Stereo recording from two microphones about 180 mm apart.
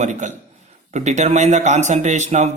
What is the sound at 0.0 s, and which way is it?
Speech, 40° right (ahead or behind).